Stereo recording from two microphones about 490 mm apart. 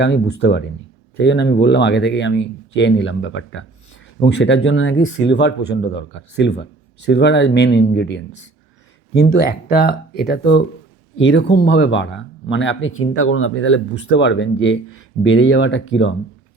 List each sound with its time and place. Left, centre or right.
0.0 s speech: left